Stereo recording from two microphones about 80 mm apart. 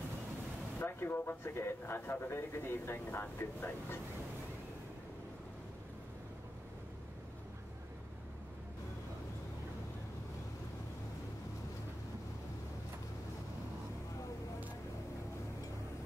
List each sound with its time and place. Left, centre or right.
0.7 s speech: left